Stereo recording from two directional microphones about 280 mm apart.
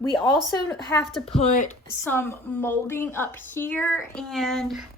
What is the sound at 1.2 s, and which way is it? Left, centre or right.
Speech, left.